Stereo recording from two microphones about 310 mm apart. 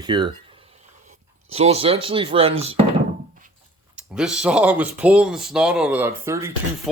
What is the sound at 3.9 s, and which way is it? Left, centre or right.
Speech, centre.